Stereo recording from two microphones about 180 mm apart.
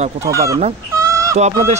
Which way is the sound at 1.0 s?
15° right (ahead or behind).